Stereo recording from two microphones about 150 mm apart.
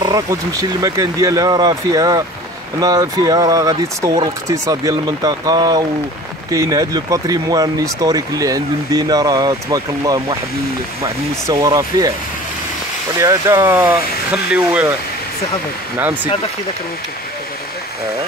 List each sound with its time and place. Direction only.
0.0 s speech: 25° right (ahead or behind)
13.2 s speech: 20° right (ahead or behind)